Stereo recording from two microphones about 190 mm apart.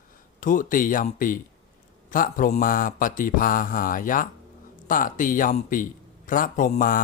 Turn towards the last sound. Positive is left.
turn(degrees=45)  # may be behind; listen again after turning